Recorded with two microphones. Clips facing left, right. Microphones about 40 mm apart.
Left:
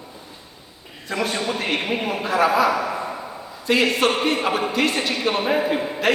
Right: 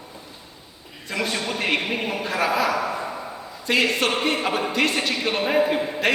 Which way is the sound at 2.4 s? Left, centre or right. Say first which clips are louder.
Left 4 dB; centre.